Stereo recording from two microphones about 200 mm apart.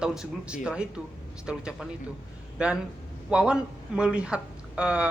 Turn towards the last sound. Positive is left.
turn(degrees=-5)  # may be behind; listen again after turning